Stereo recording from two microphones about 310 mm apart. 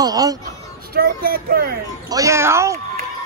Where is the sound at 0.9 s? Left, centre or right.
Right.